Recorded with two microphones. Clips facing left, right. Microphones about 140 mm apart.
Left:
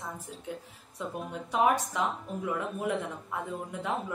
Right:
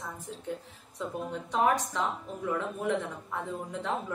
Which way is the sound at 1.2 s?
5° left (ahead or behind).